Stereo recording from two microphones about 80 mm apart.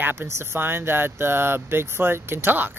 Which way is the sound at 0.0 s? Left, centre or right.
Right.